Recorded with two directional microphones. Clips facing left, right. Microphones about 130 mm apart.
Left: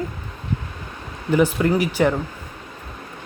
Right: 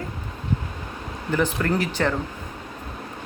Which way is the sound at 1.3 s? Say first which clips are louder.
Left 5 dB; 15° left (ahead or behind).